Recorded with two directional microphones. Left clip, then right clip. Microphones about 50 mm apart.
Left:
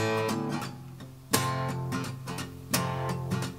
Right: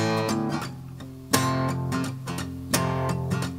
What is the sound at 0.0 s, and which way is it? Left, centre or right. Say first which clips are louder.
Music: right 3 dB; right.